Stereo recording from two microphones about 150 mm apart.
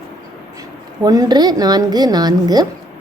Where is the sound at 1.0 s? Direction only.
25° right (ahead or behind).